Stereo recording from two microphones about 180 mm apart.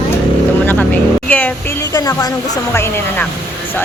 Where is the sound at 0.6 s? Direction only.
10° left (ahead or behind).